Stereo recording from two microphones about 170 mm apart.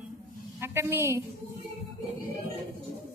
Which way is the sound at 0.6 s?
15° right (ahead or behind).